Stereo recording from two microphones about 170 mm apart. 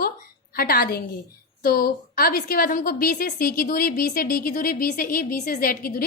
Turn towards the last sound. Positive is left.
turn(degrees=55)  # may be behind; listen again after turning